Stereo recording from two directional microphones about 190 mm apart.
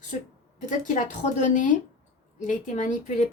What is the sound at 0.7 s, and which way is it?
Speech, 40° left (ahead or behind).